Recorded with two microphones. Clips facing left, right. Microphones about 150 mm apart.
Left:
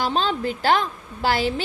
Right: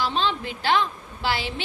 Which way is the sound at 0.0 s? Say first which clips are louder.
Left 3 dB; 45° left (ahead or behind).